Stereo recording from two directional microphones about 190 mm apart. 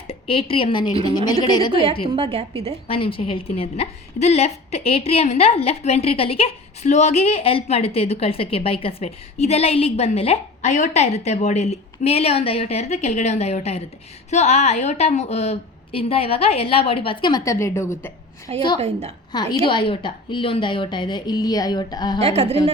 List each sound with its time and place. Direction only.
0.1 s a woman's voice: 30° left (ahead or behind)
2.1 s a woman's voice: 30° right (ahead or behind)
2.8 s a woman's voice: 30° left (ahead or behind); by 18.1 s 15° left (ahead or behind)
18.8 s a woman's voice: 35° right (ahead or behind)
19.3 s a woman's voice: 20° left (ahead or behind)
22.2 s a woman's voice: 30° right (ahead or behind)